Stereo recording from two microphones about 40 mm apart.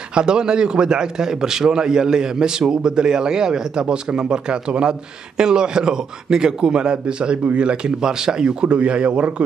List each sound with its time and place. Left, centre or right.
0.1 s a man's voice: right